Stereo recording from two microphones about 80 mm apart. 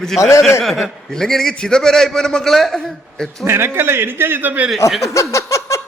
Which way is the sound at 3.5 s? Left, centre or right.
Right.